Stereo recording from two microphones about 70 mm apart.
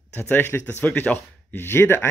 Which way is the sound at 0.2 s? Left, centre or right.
Left.